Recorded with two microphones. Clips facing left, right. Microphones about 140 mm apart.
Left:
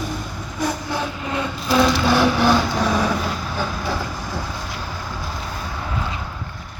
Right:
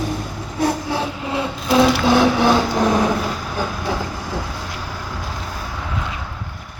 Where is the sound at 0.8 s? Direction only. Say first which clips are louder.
Right 2 dB; 10° right (ahead or behind).